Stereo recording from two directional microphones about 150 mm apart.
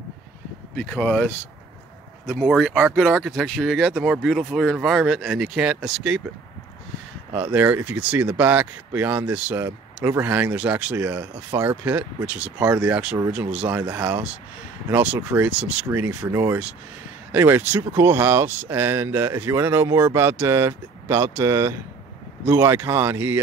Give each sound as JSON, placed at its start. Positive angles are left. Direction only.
{"t": 0.7, "sound": "speech", "side_deg": 5}
{"t": 7.3, "sound": "speech", "side_deg": -10}